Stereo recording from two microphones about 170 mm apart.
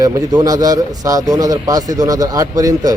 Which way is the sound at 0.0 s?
20° right (ahead or behind).